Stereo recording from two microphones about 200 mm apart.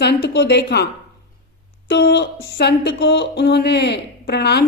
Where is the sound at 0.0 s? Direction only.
55° left (ahead or behind).